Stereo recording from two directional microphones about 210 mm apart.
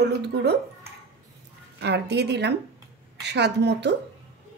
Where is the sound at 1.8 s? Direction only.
50° right (ahead or behind).